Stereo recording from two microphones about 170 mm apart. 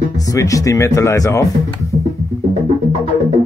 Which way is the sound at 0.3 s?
20° left (ahead or behind).